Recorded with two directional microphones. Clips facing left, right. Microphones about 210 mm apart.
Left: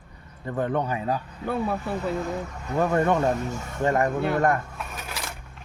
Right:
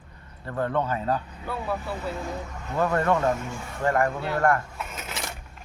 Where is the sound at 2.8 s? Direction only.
15° left (ahead or behind).